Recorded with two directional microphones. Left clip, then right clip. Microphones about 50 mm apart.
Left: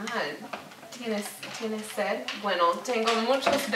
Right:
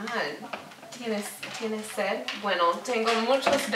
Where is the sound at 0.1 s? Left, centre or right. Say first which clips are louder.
Right 1 dB; centre.